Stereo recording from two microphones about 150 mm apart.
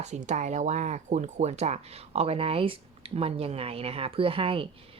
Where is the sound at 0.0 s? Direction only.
50° right (ahead or behind).